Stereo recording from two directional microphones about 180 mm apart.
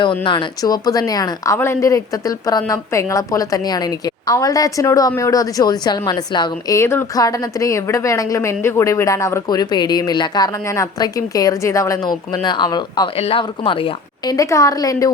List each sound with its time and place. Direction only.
0.3 s speech: 25° left (ahead or behind)